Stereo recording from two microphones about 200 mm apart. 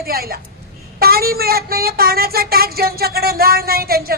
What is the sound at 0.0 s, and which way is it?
Speech, 50° right (ahead or behind).